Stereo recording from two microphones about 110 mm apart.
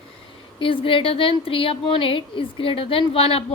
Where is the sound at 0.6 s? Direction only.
55° left (ahead or behind).